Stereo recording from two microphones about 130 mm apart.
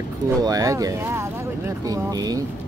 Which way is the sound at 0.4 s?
25° right (ahead or behind).